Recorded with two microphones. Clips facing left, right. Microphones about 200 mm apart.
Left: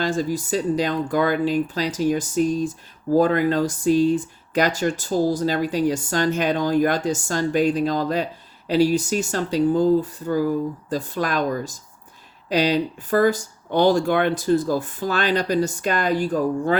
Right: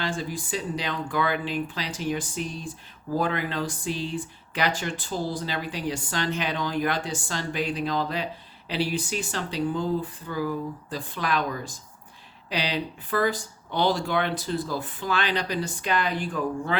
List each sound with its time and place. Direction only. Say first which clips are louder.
0.0 s speech: left 8 dB; 40° left (ahead or behind)